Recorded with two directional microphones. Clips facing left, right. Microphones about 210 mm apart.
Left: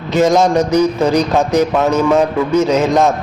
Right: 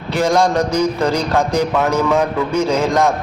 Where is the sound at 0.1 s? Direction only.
20° left (ahead or behind).